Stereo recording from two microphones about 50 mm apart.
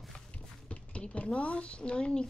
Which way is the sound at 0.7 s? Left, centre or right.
Left.